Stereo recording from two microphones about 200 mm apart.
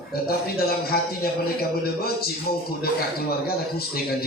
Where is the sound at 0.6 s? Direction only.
50° left (ahead or behind).